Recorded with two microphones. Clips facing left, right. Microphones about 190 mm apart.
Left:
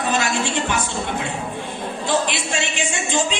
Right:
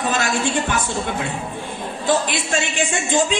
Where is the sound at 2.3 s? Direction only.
50° right (ahead or behind).